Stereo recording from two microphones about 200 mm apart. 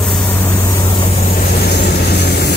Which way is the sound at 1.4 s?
50° left (ahead or behind).